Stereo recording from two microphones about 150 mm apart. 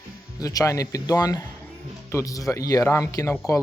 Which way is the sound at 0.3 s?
25° left (ahead or behind).